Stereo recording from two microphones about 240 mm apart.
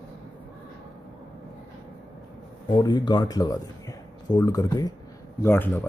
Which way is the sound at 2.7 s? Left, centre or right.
Centre.